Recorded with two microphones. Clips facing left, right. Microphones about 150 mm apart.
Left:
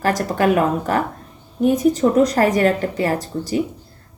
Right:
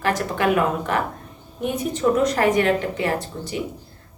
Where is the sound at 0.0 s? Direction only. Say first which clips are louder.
Left 3 dB; 40° left (ahead or behind).